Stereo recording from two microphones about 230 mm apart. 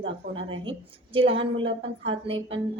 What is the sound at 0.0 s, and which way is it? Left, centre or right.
A woman's voice, right.